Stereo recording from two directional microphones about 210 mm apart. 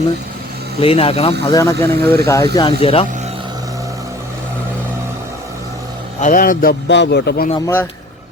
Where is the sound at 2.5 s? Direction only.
25° left (ahead or behind).